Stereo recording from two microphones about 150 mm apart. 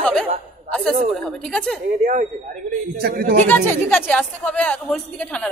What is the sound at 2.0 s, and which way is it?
Speech, 60° right (ahead or behind).